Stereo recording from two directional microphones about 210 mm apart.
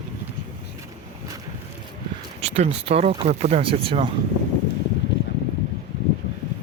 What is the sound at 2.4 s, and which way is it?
Speech, 30° right (ahead or behind).